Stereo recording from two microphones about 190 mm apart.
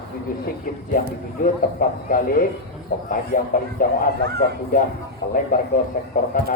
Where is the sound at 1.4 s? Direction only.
50° left (ahead or behind).